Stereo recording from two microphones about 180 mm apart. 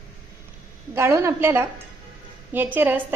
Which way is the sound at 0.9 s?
15° right (ahead or behind).